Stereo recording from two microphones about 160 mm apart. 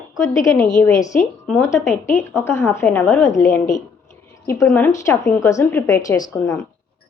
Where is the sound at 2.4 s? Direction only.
15° left (ahead or behind).